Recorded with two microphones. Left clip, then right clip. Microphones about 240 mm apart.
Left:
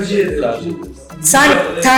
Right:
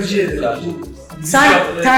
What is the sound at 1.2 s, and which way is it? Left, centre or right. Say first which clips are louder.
Speech: even; centre.